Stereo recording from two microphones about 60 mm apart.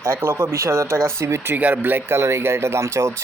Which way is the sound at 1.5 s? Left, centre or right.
Right.